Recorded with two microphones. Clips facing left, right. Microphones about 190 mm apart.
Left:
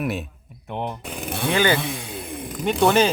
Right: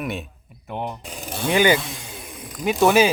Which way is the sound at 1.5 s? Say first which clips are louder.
Right 3 dB; 15° right (ahead or behind).